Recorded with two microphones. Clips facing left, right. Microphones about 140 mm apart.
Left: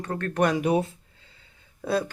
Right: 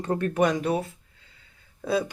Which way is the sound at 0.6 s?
15° left (ahead or behind).